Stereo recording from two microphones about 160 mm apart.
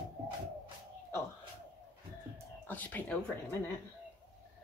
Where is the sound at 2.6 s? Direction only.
10° left (ahead or behind).